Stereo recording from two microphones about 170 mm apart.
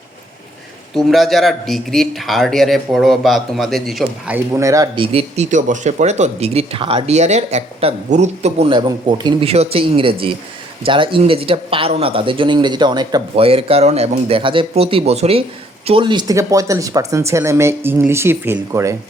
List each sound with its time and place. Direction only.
0.9 s speech: centre (ahead or behind)
4.5 s speech: 20° right (ahead or behind)
5.1 s speech: 45° right (ahead or behind); by 18.9 s 15° right (ahead or behind)